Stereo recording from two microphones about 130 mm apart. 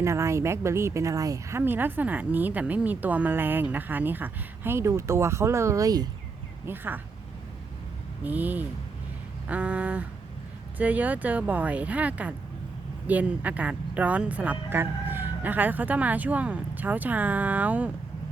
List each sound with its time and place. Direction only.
0.0 s speech: 20° right (ahead or behind)
6.7 s speech: 15° right (ahead or behind)
8.2 s speech: 15° right (ahead or behind)